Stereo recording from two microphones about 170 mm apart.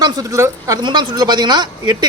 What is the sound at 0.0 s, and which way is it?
A woman's voice, 20° right (ahead or behind).